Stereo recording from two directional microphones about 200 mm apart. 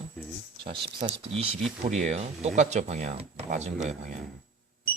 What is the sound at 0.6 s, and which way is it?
Speech, 25° right (ahead or behind).